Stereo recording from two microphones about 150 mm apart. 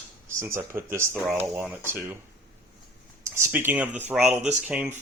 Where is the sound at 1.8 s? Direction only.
15° right (ahead or behind).